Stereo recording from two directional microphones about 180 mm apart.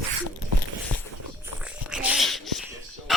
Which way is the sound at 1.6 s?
5° right (ahead or behind).